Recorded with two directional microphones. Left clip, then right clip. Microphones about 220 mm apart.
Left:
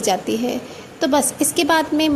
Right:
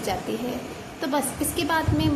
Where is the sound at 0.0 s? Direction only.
35° left (ahead or behind).